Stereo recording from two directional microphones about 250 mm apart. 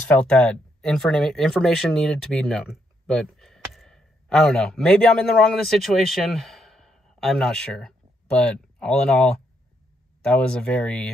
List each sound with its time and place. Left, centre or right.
0.2 s speech: centre